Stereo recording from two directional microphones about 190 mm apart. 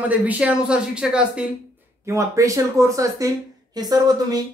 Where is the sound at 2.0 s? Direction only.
15° right (ahead or behind).